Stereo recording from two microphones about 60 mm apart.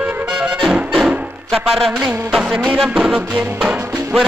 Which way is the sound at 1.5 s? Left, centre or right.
Centre.